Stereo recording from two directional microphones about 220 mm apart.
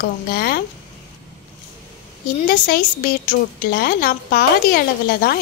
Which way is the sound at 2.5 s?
45° left (ahead or behind).